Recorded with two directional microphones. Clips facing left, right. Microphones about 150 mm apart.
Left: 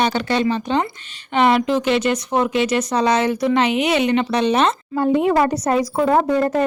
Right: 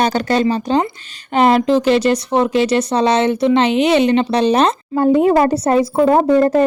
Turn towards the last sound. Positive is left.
turn(degrees=-30)  # may be behind; listen again after turning